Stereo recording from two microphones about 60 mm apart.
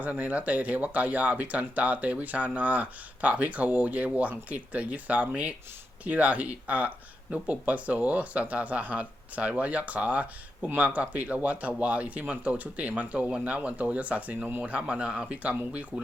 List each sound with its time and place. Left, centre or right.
0.0 s speech: right